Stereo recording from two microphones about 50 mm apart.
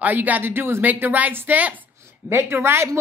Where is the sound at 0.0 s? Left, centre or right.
Right.